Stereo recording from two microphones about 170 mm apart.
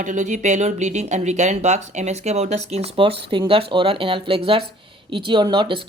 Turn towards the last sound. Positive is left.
turn(degrees=-30)  # may be behind; listen again after turning